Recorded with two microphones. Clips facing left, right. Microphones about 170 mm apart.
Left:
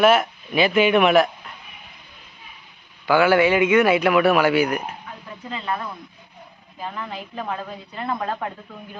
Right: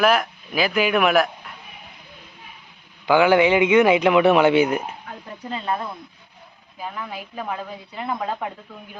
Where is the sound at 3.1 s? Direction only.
15° right (ahead or behind).